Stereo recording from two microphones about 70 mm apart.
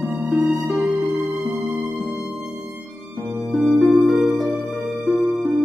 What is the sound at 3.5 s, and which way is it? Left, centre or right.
Music, centre.